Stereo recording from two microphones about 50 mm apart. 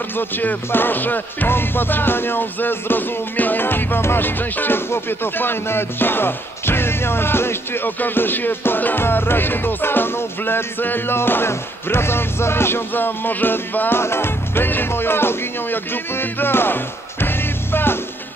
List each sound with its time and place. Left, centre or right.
0.1 s speech: left
0.7 s music: left